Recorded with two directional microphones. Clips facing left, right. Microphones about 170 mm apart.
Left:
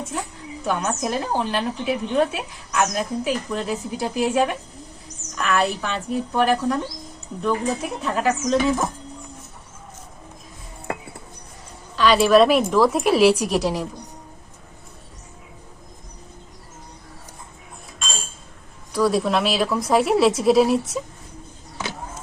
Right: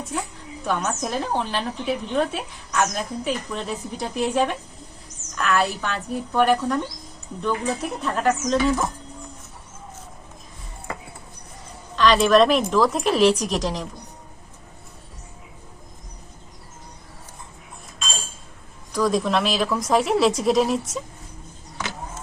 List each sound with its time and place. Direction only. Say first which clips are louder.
0.6 s speech: left 1 dB; centre (ahead or behind)
11.9 s a woman's voice: left 1 dB; 5° left (ahead or behind)
18.9 s speech: left 1 dB; 5° left (ahead or behind)